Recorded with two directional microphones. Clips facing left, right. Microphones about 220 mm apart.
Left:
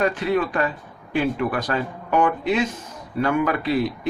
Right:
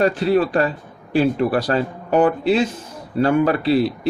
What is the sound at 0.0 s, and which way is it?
Speech, 35° right (ahead or behind).